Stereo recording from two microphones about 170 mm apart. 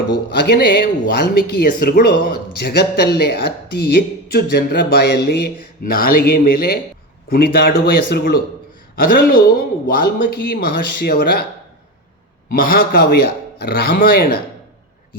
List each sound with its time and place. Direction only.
0.3 s speech: 75° left (ahead or behind)
12.5 s speech: 60° left (ahead or behind)